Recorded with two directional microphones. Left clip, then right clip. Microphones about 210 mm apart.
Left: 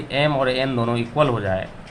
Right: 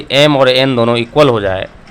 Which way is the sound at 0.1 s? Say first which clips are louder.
Right 11 dB; 55° right (ahead or behind).